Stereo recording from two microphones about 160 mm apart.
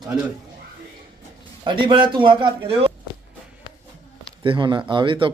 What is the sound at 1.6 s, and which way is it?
A man's voice, 30° right (ahead or behind).